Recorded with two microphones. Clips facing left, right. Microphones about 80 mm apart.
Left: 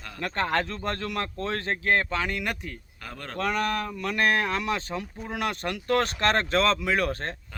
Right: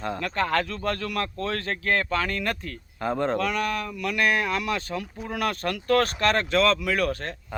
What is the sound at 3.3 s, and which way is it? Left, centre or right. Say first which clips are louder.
Speech: right 1 dB; left.